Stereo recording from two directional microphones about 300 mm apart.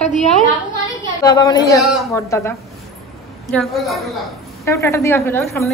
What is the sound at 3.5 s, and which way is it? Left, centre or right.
A woman's voice, centre.